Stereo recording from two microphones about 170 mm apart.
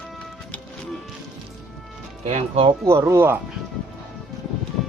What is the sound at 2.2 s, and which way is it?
Speech, 35° right (ahead or behind).